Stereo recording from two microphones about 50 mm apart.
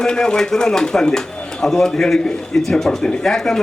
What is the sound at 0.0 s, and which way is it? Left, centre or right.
A man's voice, centre.